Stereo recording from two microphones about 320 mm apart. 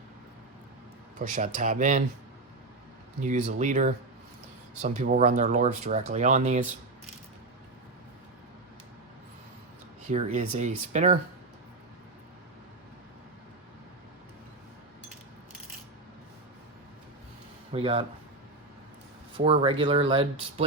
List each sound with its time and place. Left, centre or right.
1.2 s speech: right
3.2 s speech: right
10.1 s speech: centre
17.7 s speech: centre
19.4 s speech: centre